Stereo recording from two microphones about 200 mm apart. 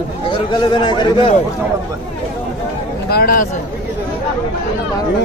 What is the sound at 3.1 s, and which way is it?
Speech, 50° left (ahead or behind).